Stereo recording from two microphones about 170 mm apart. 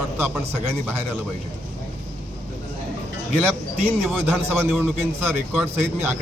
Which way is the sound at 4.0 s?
10° right (ahead or behind).